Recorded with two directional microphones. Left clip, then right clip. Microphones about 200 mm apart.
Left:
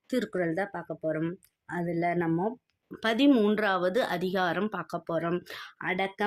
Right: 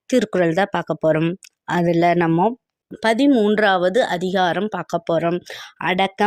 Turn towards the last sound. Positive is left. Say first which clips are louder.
# right 11 dB
turn(degrees=-45)  # may be behind; listen again after turning